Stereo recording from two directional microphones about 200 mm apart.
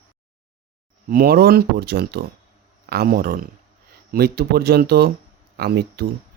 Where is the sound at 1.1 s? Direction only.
50° right (ahead or behind).